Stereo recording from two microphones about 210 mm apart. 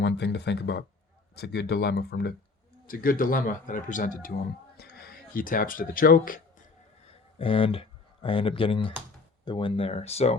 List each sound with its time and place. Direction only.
0.0 s a man's voice: 55° left (ahead or behind)
7.1 s speech: 25° left (ahead or behind)